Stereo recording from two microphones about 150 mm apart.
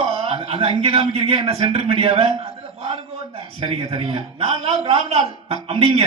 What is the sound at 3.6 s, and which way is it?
A man's voice, 35° right (ahead or behind).